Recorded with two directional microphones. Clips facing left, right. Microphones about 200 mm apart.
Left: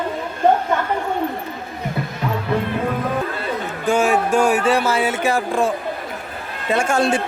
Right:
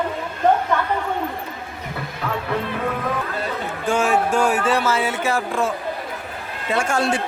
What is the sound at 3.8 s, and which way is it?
Speech, 5° left (ahead or behind).